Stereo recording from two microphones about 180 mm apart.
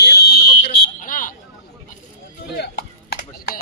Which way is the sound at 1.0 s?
50° left (ahead or behind).